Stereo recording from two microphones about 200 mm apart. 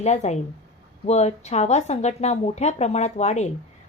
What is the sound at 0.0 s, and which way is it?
Speech, 35° left (ahead or behind).